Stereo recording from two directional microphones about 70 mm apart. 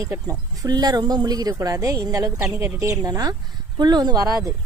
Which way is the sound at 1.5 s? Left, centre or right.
Right.